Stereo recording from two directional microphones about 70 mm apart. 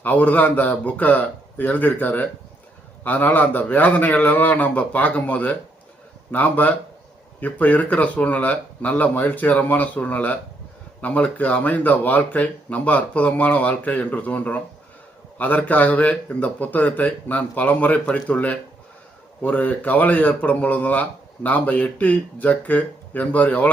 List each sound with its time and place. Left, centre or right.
0.0 s speech: left